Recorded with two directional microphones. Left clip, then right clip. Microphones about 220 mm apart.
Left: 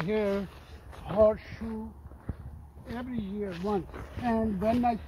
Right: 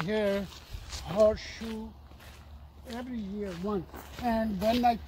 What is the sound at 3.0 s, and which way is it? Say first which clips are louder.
Speech: left 2 dB; 45° right (ahead or behind).